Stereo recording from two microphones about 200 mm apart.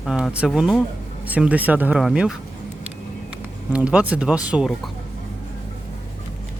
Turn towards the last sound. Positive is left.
turn(degrees=-5)  # may be behind; listen again after turning